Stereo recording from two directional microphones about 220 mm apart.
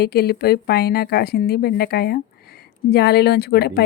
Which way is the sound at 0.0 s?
45° left (ahead or behind).